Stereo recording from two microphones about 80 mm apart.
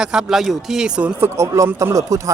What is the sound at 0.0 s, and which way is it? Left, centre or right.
Speech, centre.